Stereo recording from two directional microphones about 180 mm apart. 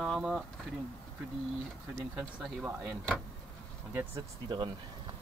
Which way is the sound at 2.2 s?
5° right (ahead or behind).